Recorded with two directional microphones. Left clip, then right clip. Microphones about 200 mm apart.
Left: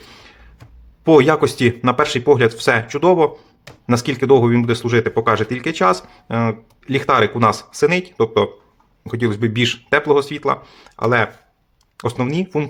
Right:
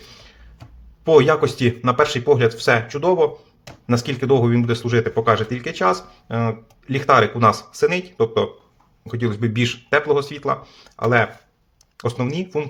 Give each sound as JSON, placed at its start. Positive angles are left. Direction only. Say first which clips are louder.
{"t": 1.0, "sound": "speech", "louder": "left 2 dB", "side_deg": 25}